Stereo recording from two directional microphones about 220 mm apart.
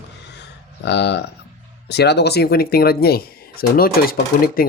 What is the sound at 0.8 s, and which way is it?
Speech, 50° left (ahead or behind).